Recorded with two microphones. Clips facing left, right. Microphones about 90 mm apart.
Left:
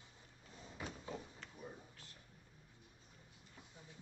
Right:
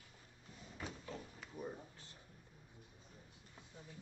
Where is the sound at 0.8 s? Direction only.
15° left (ahead or behind).